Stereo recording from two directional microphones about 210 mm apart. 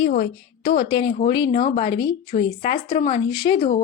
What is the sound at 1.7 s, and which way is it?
A woman's voice, 25° left (ahead or behind).